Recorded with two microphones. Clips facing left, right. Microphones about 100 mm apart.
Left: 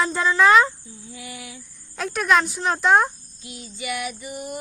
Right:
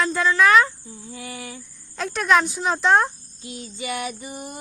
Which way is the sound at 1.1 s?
40° right (ahead or behind).